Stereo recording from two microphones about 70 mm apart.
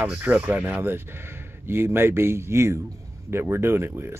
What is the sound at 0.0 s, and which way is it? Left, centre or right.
Speech, right.